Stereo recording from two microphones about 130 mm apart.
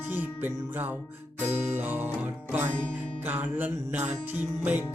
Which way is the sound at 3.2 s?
15° right (ahead or behind).